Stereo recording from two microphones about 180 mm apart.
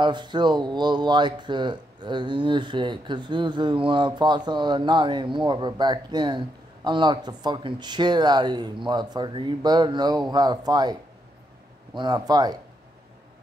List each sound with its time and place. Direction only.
0.0 s speech: 25° right (ahead or behind)